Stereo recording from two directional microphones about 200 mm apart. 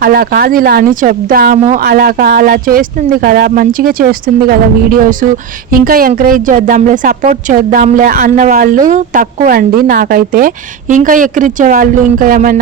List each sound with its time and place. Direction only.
0.0 s a woman's voice: 50° right (ahead or behind)